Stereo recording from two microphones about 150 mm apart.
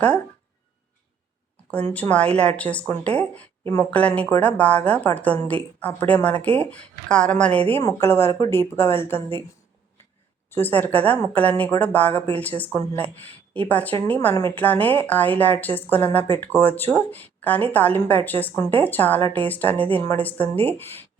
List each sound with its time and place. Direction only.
1.9 s speech: 10° left (ahead or behind)
10.5 s a woman's voice: 15° left (ahead or behind)